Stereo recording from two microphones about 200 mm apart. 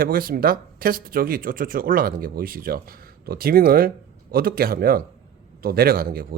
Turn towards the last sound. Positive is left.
turn(degrees=-50)  # may be behind; listen again after turning